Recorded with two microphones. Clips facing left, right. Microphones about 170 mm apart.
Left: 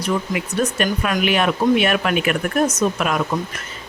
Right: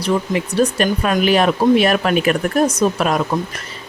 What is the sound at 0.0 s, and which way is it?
Speech, 30° right (ahead or behind).